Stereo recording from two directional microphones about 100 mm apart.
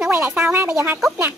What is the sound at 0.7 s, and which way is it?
Speech, 25° right (ahead or behind).